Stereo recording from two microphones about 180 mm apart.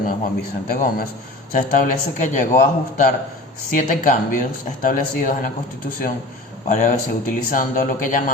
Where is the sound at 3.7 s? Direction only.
50° left (ahead or behind).